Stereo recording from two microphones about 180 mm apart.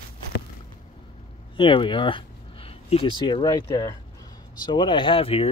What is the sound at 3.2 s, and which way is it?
Speech, 25° left (ahead or behind).